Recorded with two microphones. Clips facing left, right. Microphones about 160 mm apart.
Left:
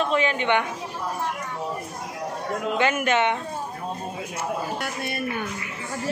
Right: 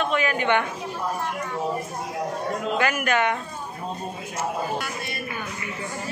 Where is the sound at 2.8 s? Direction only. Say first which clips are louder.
Left 2 dB; 25° left (ahead or behind).